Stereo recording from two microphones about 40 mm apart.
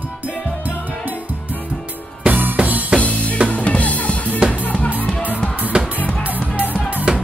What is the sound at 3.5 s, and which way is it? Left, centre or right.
Drum, left.